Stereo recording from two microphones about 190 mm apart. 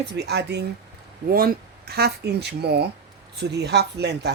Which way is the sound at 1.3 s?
50° right (ahead or behind).